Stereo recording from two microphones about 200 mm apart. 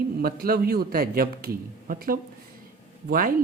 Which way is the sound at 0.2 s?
50° right (ahead or behind).